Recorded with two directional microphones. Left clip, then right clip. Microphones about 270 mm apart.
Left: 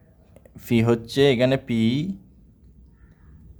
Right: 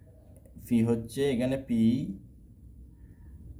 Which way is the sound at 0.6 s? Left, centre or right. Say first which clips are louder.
Left 7 dB; left.